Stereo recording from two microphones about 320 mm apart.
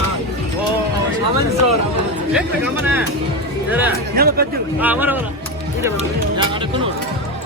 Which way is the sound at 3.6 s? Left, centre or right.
Centre.